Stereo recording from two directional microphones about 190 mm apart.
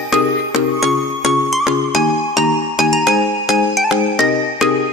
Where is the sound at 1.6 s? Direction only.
Centre (ahead or behind).